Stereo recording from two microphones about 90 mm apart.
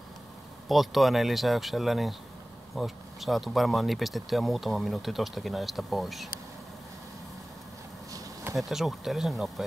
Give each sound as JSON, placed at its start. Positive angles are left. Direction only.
{"t": 0.7, "sound": "speech", "side_deg": 0}
{"t": 8.5, "sound": "speech", "side_deg": 0}